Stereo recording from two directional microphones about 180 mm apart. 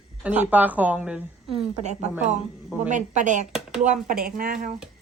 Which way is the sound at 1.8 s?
40° right (ahead or behind).